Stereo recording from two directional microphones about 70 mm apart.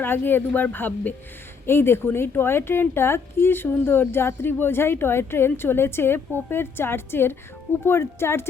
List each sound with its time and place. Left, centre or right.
0.0 s speech: left